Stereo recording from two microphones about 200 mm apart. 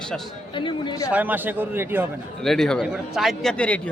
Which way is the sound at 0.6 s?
25° left (ahead or behind).